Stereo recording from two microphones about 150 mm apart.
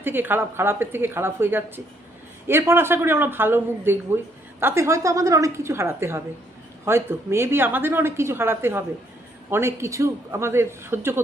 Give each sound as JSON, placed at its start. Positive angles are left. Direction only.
{"t": 0.0, "sound": "speech", "side_deg": -15}